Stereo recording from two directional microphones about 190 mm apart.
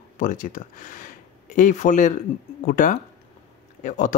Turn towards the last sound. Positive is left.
turn(degrees=40)  # may be behind; listen again after turning